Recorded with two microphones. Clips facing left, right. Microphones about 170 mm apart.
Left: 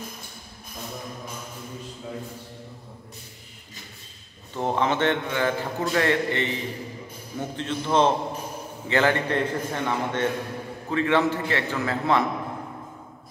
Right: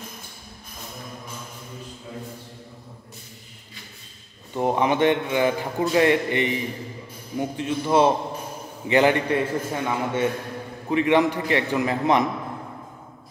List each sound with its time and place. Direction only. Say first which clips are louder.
4.6 s a man's voice: right 3 dB; 15° right (ahead or behind)